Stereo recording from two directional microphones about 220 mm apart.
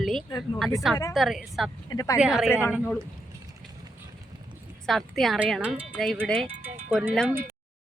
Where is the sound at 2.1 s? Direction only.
5° right (ahead or behind).